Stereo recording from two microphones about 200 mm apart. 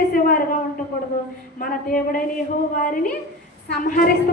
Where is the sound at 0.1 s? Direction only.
45° left (ahead or behind).